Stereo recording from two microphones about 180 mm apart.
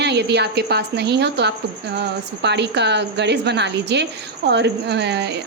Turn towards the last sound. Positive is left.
turn(degrees=-70)  # may be behind; listen again after turning